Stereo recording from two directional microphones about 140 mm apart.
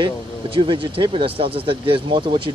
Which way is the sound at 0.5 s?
35° right (ahead or behind).